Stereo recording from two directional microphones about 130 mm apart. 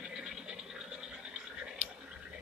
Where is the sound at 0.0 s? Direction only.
5° right (ahead or behind).